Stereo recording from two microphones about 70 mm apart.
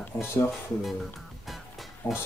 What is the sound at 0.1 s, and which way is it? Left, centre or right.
Speech, left.